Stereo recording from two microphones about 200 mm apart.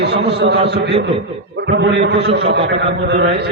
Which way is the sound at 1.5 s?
60° right (ahead or behind).